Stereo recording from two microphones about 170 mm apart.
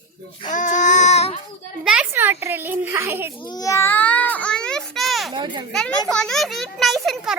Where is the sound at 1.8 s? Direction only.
10° right (ahead or behind).